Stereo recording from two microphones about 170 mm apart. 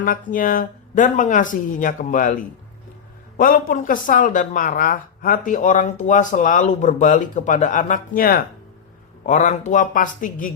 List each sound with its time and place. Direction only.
0.0 s speech: 55° left (ahead or behind)
3.3 s speech: 55° left (ahead or behind)